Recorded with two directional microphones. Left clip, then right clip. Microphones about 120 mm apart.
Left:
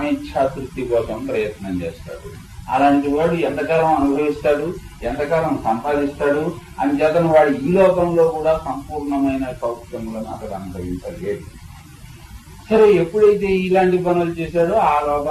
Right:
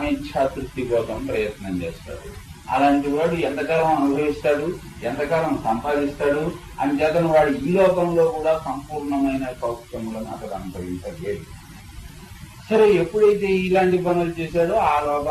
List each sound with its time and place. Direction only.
0.0 s a man's voice: 35° right (ahead or behind)
12.6 s a man's voice: 35° right (ahead or behind)